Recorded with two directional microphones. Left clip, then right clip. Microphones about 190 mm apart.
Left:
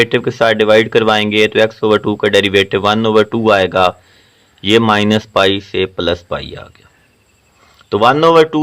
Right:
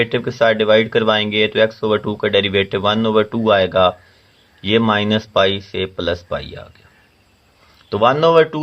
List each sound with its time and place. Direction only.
0.0 s speech: 35° left (ahead or behind)
7.9 s speech: 35° left (ahead or behind)